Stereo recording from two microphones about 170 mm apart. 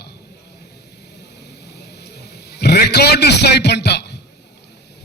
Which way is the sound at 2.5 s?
75° left (ahead or behind).